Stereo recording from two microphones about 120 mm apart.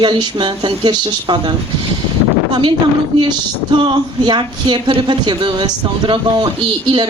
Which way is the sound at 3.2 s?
40° right (ahead or behind).